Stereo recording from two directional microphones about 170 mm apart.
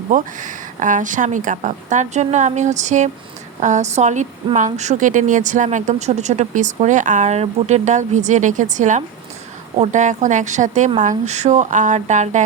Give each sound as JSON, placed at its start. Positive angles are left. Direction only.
{"t": 0.1, "sound": "speech", "side_deg": -50}